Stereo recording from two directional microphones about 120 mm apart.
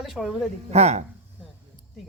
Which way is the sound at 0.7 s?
65° right (ahead or behind).